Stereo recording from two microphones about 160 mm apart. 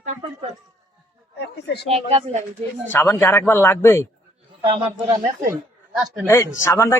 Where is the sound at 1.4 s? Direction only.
90° left.